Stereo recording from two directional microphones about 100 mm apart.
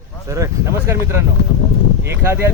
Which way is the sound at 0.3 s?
35° right (ahead or behind).